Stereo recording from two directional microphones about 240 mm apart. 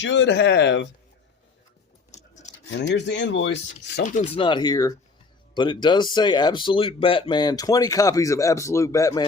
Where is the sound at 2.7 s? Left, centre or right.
Left.